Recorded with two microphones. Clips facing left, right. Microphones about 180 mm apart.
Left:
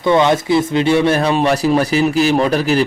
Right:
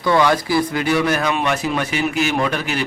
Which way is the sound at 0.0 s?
25° left (ahead or behind).